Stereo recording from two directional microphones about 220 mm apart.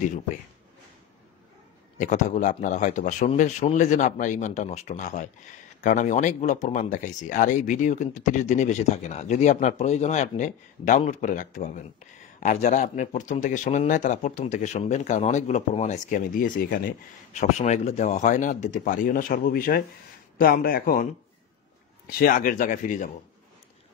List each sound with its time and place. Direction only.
2.0 s speech: 35° left (ahead or behind)